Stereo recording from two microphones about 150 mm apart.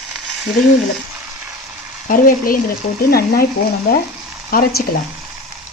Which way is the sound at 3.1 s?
90° left.